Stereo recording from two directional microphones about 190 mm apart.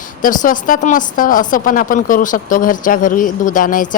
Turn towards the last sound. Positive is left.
turn(degrees=45)  # may be behind; listen again after turning